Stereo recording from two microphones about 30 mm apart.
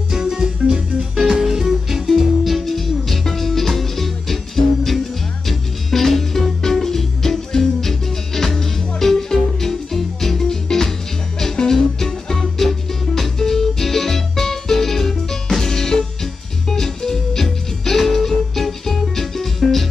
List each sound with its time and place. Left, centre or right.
0.1 s organ: centre
1.3 s music: centre